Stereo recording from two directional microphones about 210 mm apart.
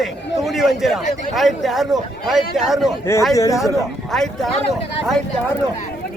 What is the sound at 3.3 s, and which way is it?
Speech, 15° left (ahead or behind).